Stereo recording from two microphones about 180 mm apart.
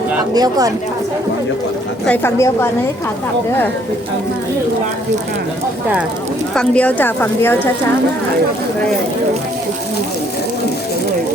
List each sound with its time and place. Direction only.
0.3 s speech: 20° right (ahead or behind)
2.0 s speech: 10° left (ahead or behind)
6.5 s speech: 5° left (ahead or behind)